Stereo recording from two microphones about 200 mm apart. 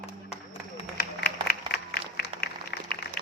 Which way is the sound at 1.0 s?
50° left (ahead or behind).